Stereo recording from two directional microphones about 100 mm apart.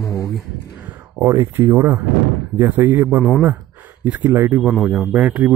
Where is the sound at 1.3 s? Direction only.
30° right (ahead or behind).